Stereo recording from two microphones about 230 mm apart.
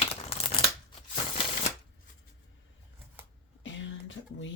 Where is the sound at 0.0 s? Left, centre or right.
Left.